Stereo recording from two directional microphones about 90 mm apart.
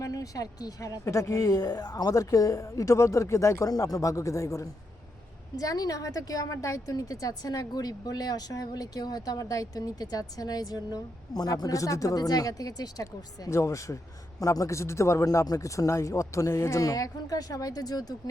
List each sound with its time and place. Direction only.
0.0 s a woman's voice: 40° left (ahead or behind)